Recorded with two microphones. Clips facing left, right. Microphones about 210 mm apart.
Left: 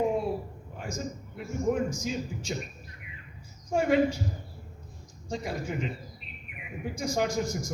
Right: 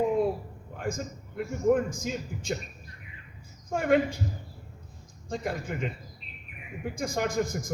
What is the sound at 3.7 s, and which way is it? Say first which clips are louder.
Speech: even; 55° right (ahead or behind).